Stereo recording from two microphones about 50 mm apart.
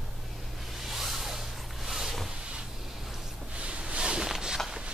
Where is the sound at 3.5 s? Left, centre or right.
Right.